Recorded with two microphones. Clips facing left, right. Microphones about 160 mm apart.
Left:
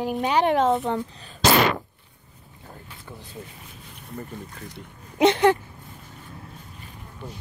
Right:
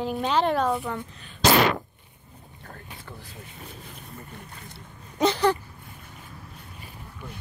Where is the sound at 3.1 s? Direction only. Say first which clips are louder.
Left 5 dB; 20° left (ahead or behind).